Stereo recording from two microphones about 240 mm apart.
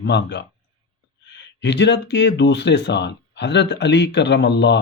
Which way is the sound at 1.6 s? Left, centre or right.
Left.